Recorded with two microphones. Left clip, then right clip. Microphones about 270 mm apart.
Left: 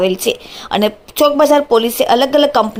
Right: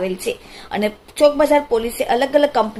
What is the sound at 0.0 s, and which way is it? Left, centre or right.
Speech, left.